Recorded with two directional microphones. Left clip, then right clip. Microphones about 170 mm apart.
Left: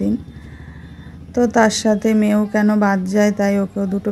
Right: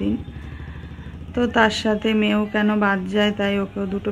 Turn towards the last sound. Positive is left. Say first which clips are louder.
# left 4 dB
turn(degrees=25)  # may be behind; listen again after turning